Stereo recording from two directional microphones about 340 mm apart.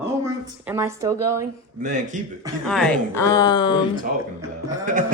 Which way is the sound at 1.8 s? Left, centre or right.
Right.